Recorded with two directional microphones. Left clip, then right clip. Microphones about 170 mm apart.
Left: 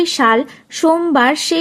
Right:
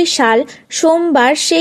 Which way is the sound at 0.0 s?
25° right (ahead or behind).